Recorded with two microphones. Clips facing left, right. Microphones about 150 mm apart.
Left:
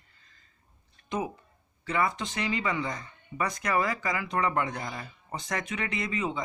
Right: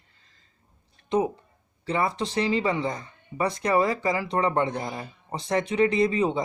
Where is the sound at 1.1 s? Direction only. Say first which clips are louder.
Right 8 dB; 30° right (ahead or behind).